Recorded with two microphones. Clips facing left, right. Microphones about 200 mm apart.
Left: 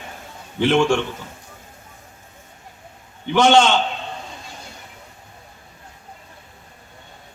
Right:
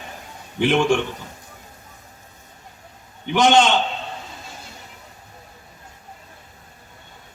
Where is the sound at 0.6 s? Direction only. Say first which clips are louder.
Left 1 dB; 15° right (ahead or behind).